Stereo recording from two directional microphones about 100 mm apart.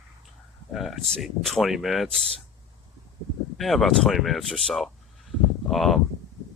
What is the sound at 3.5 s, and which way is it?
Speech, centre (ahead or behind).